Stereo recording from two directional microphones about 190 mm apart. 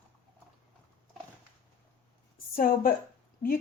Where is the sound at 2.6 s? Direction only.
50° left (ahead or behind).